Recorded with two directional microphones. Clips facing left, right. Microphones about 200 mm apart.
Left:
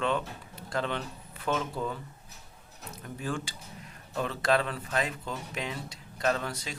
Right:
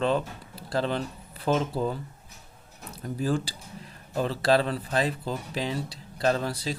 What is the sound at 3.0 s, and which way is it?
Speech, 35° right (ahead or behind).